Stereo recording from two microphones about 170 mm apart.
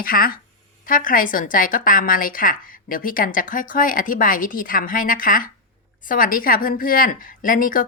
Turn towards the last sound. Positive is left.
turn(degrees=55)  # may be behind; listen again after turning